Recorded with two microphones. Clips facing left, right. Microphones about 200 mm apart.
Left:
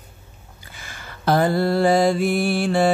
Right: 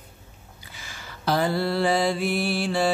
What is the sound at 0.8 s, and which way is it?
Mantra, 55° left (ahead or behind).